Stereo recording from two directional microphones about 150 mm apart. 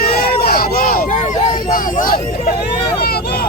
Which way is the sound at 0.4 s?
85° left.